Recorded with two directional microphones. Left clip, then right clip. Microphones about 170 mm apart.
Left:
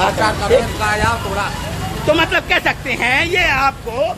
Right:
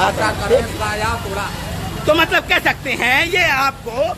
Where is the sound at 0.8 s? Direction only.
25° left (ahead or behind).